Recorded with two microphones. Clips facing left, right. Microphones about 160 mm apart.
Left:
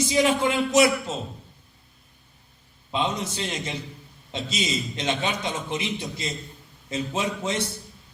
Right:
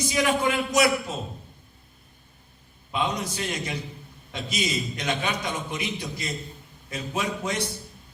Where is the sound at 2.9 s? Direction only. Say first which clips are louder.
Left 1 dB; 25° left (ahead or behind).